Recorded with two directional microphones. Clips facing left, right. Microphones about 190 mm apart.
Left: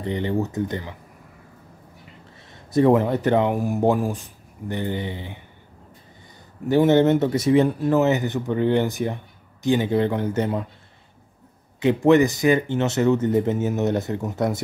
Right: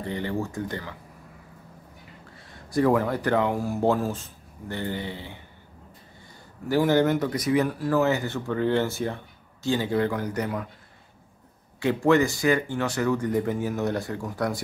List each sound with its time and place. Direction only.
0.0 s speech: 20° left (ahead or behind)
2.5 s speech: 20° left (ahead or behind)
6.7 s speech: 25° left (ahead or behind)
11.8 s speech: 20° left (ahead or behind)